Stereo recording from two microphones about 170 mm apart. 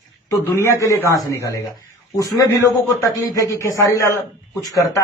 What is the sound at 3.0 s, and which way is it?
A man's voice, 20° left (ahead or behind).